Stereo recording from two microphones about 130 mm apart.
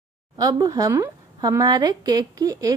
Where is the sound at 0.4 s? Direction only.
30° right (ahead or behind).